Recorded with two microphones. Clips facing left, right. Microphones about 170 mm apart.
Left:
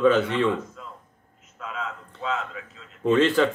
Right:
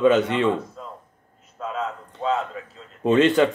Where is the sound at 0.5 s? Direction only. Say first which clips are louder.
Right 3 dB; 35° right (ahead or behind).